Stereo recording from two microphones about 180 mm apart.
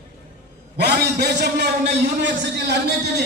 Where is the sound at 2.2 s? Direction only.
75° right (ahead or behind).